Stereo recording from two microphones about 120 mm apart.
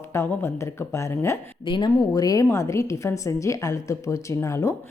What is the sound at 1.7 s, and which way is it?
Speech, 40° left (ahead or behind).